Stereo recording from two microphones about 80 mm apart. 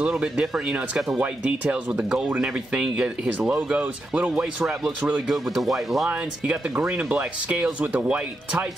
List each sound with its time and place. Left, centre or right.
0.0 s speech: centre
3.3 s speech: right; by 6.0 s centre
6.0 s speech: centre